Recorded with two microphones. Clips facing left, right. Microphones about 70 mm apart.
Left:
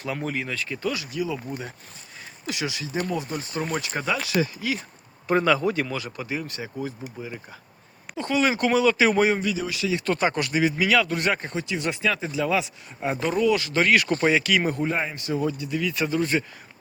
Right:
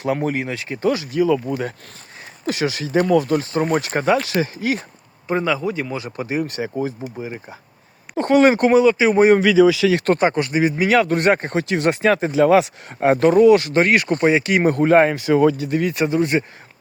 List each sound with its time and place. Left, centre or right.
0.1 s speech: right
1.5 s speech: right
2.5 s speech: right
3.1 s speech: right
3.6 s speech: right
5.3 s speech: centre
5.9 s speech: right
6.1 s speech: right
8.1 s speech: right
9.4 s speech: right
10.2 s speech: right
15.7 s speech: right
16.1 s speech: right